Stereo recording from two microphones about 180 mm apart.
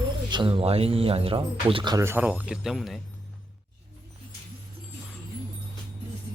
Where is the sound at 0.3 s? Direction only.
25° right (ahead or behind).